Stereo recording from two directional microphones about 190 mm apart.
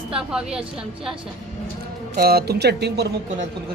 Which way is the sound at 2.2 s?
55° right (ahead or behind).